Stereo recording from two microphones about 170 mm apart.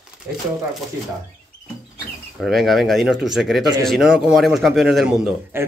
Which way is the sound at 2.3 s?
Centre (ahead or behind).